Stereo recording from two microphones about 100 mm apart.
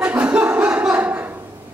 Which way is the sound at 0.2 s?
10° right (ahead or behind).